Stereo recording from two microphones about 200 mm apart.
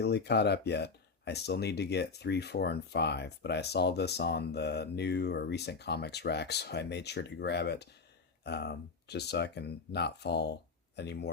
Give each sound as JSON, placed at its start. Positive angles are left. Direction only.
{"t": 0.0, "sound": "speech", "side_deg": 55}